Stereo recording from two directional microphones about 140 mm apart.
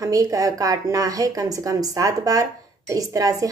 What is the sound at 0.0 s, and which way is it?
Speech, 25° right (ahead or behind).